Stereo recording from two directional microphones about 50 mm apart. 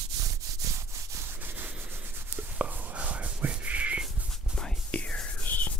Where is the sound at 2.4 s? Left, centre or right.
Right.